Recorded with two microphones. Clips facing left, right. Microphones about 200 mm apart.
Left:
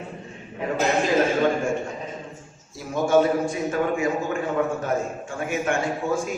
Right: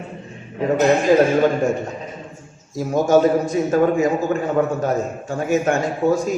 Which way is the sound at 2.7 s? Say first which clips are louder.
Right 4 dB; 40° right (ahead or behind).